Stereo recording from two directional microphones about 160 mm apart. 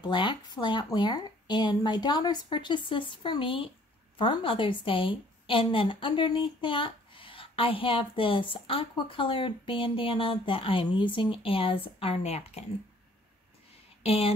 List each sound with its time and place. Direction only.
0.0 s a woman's voice: 30° left (ahead or behind)
14.0 s a woman's voice: 40° left (ahead or behind)